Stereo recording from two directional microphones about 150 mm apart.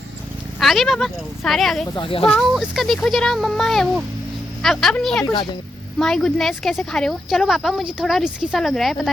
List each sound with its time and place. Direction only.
0.6 s speech: centre (ahead or behind)
2.0 s speech: 35° left (ahead or behind)
2.6 s speech: centre (ahead or behind)
5.2 s speech: 30° left (ahead or behind)
6.0 s speech: 5° left (ahead or behind)